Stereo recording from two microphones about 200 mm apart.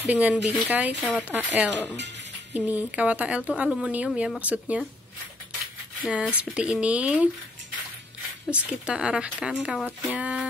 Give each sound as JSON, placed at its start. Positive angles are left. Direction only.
{"t": 0.0, "sound": "speech", "side_deg": -5}
{"t": 1.7, "sound": "speech", "side_deg": 10}
{"t": 2.0, "sound": "speech", "side_deg": -60}
{"t": 2.5, "sound": "speech", "side_deg": -10}
{"t": 6.0, "sound": "speech", "side_deg": -5}
{"t": 8.5, "sound": "speech", "side_deg": -5}